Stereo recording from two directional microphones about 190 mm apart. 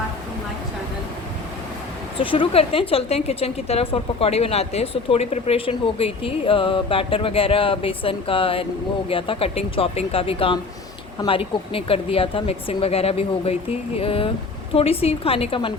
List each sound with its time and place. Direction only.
2.1 s a woman's voice: 25° left (ahead or behind)